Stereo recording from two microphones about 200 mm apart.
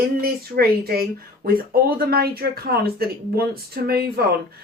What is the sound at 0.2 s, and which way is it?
Speech, 50° right (ahead or behind).